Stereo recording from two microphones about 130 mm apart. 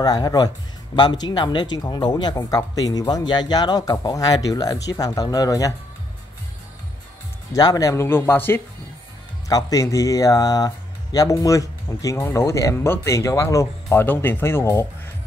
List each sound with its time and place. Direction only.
0.0 s speech: 30° left (ahead or behind)
7.5 s speech: 30° left (ahead or behind)
9.5 s speech: 25° left (ahead or behind)